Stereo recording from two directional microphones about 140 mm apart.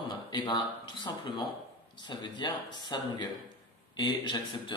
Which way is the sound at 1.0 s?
30° left (ahead or behind).